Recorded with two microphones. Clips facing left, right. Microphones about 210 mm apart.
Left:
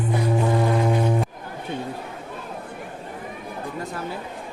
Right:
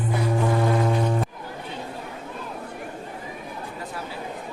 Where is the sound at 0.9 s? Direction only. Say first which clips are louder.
Left 2 dB; 10° left (ahead or behind).